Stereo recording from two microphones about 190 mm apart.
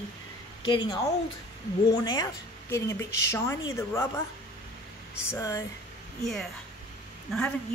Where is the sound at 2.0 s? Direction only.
20° left (ahead or behind).